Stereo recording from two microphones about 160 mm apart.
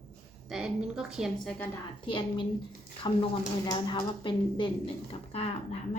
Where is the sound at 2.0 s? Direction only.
30° left (ahead or behind).